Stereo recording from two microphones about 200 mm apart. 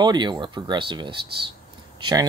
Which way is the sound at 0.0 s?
20° right (ahead or behind).